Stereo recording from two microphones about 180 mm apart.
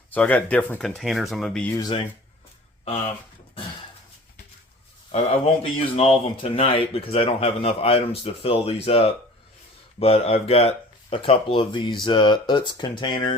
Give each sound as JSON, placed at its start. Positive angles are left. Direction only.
{"t": 0.1, "sound": "speech", "side_deg": 10}
{"t": 1.7, "sound": "speech", "side_deg": 25}
{"t": 5.6, "sound": "speech", "side_deg": 30}